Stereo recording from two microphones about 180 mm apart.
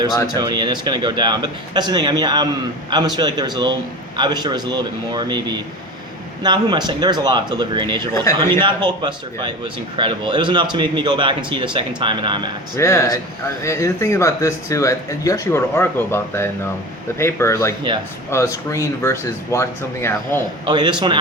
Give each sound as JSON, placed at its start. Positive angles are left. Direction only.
{"t": 0.3, "sound": "speech", "side_deg": -25}
{"t": 8.1, "sound": "speech", "side_deg": 15}
{"t": 8.5, "sound": "speech", "side_deg": -25}
{"t": 12.7, "sound": "speech", "side_deg": 15}
{"t": 20.7, "sound": "speech", "side_deg": -25}